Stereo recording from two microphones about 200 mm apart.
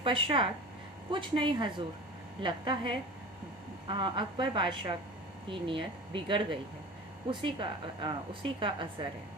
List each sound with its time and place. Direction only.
0.0 s a woman's voice: 25° right (ahead or behind)